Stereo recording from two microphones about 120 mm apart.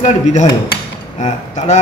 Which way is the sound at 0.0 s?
80° left.